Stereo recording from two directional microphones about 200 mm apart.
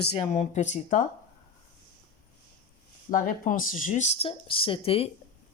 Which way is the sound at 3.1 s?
45° left (ahead or behind).